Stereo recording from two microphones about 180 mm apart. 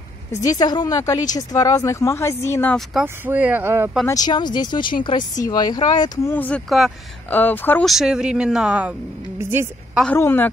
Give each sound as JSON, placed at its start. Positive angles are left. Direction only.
{"t": 0.3, "sound": "speech", "side_deg": 20}
{"t": 2.9, "sound": "speech", "side_deg": -5}
{"t": 4.1, "sound": "speech", "side_deg": 20}
{"t": 6.3, "sound": "speech", "side_deg": 10}
{"t": 7.9, "sound": "a woman's voice", "side_deg": -5}
{"t": 10.0, "sound": "speech", "side_deg": 10}